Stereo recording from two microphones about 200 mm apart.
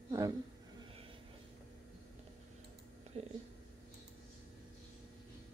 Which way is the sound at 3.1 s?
30° right (ahead or behind).